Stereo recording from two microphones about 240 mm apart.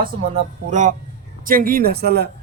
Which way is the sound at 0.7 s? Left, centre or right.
Right.